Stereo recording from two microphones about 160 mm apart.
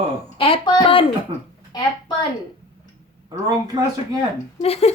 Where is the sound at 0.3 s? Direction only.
35° left (ahead or behind).